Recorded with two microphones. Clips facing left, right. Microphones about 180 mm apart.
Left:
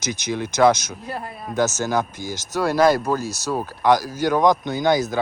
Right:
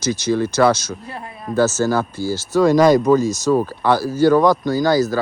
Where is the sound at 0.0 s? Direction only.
15° left (ahead or behind).